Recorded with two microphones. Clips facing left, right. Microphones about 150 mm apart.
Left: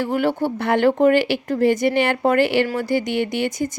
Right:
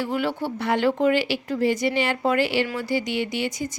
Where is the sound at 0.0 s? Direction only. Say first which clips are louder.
Left 5 dB; 50° left (ahead or behind).